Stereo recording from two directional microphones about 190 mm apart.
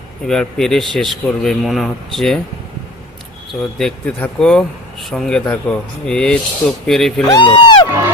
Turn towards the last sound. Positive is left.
turn(degrees=25)  # may be behind; listen again after turning